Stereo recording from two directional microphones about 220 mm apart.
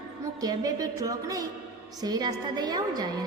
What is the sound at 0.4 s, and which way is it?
A woman's voice, 15° right (ahead or behind).